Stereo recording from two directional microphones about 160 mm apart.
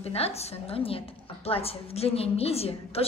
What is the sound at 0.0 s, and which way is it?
A woman's voice, 40° left (ahead or behind).